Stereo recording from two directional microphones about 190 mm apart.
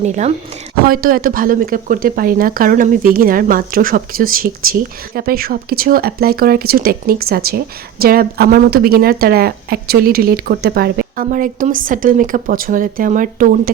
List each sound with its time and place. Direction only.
0.0 s speech: 35° right (ahead or behind)
0.9 s speech: 50° right (ahead or behind)